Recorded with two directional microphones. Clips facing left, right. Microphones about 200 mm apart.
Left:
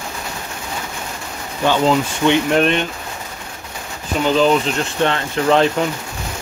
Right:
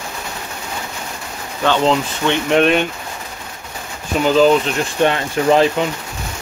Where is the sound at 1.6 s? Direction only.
5° left (ahead or behind).